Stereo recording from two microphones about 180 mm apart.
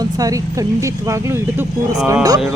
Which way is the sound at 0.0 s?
20° right (ahead or behind).